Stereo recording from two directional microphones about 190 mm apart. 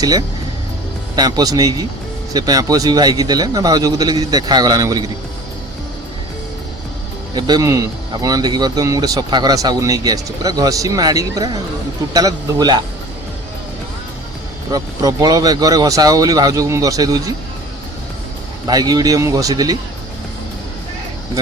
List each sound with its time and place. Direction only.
0.0 s speech: 20° right (ahead or behind)
7.3 s speech: 20° right (ahead or behind)
14.7 s speech: 20° right (ahead or behind)
18.7 s speech: 20° right (ahead or behind)